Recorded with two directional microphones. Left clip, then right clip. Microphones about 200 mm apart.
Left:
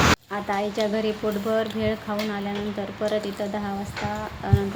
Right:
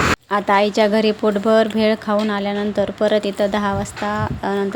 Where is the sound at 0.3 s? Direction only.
55° right (ahead or behind).